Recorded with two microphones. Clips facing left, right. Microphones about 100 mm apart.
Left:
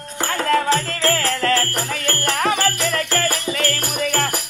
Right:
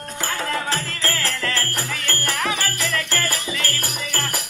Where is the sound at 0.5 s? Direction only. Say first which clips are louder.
Left 7 dB; 60° left (ahead or behind).